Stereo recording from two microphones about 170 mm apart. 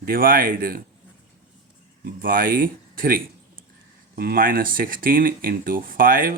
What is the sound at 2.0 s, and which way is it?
Speech, 55° right (ahead or behind).